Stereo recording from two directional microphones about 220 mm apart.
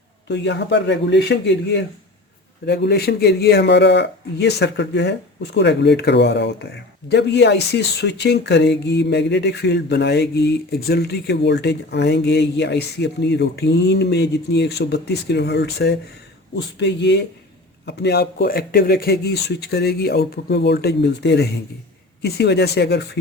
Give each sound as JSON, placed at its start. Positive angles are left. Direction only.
{"t": 0.3, "sound": "speech", "side_deg": 50}